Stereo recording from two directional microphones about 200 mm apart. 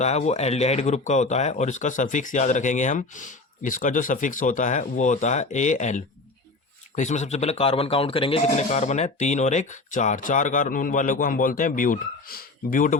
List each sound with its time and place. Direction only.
0.0 s speech: 35° left (ahead or behind)